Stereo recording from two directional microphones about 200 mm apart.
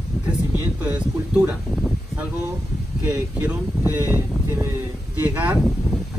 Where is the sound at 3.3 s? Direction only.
10° right (ahead or behind).